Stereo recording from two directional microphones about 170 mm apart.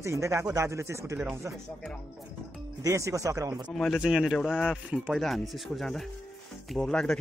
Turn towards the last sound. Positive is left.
turn(degrees=5)  # may be behind; listen again after turning